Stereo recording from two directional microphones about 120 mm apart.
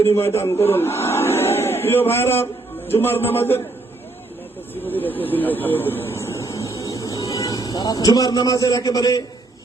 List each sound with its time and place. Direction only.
0.0 s a man's voice: 20° left (ahead or behind)
4.7 s speech: 15° left (ahead or behind); by 9.2 s 30° left (ahead or behind)